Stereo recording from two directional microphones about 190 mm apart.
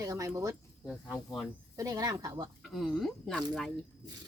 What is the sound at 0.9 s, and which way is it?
Speech, centre (ahead or behind).